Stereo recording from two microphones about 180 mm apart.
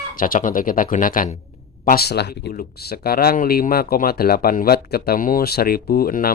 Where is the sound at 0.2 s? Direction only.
50° left (ahead or behind).